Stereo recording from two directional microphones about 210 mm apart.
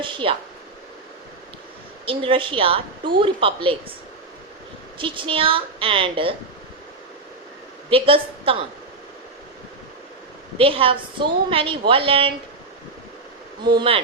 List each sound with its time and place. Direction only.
0.0 s a woman's voice: 25° right (ahead or behind)
2.0 s a woman's voice: 25° right (ahead or behind)
4.9 s a woman's voice: 25° right (ahead or behind)
7.9 s a woman's voice: 25° right (ahead or behind)
10.6 s a woman's voice: 25° right (ahead or behind)
13.7 s a woman's voice: 25° right (ahead or behind)